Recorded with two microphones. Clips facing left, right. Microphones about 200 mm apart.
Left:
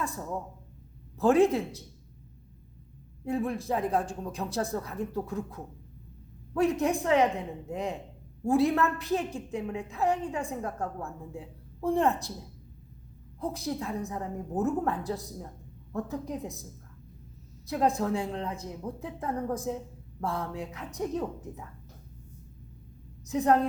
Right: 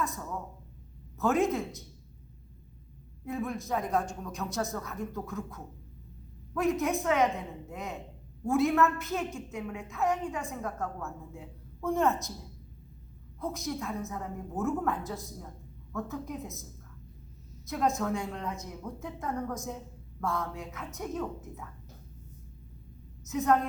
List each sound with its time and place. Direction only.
1.2 s a woman's voice: 30° left (ahead or behind)
3.2 s a woman's voice: 30° left (ahead or behind)
13.4 s a woman's voice: 30° left (ahead or behind)
17.7 s a woman's voice: 30° left (ahead or behind)
23.2 s a woman's voice: 35° left (ahead or behind)